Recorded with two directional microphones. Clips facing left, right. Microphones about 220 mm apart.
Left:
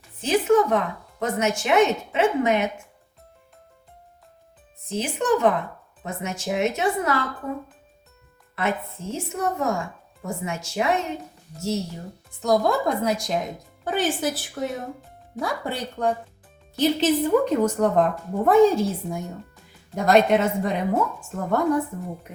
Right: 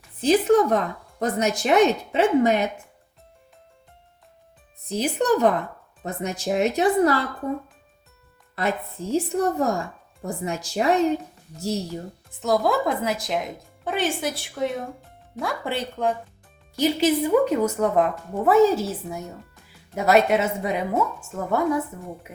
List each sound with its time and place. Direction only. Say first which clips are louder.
0.2 s speech: right 2 dB; 35° right (ahead or behind)
4.9 s speech: right 1 dB; 35° right (ahead or behind)
8.5 s speech: even; 35° right (ahead or behind)
12.4 s a woman's voice: even; 5° right (ahead or behind)